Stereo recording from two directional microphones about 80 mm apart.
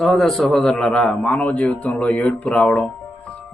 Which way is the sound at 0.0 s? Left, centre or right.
Centre.